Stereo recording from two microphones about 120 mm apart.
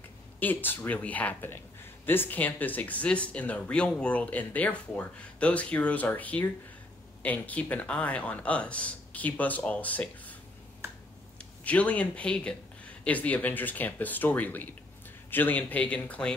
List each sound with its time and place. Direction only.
0.4 s speech: 15° left (ahead or behind)
10.8 s finger snapping: 25° right (ahead or behind)
11.6 s speech: 10° left (ahead or behind)